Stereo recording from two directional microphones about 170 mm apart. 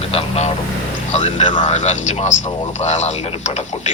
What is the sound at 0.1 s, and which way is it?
Speech, 35° left (ahead or behind).